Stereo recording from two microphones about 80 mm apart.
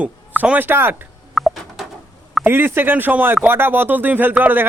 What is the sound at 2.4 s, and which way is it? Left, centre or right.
Speech, right.